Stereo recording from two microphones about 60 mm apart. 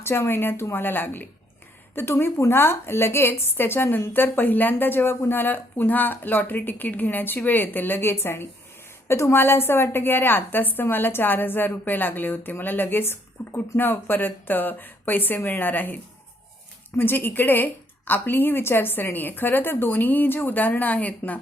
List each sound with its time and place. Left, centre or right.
0.0 s a woman's voice: left
17.0 s a woman's voice: left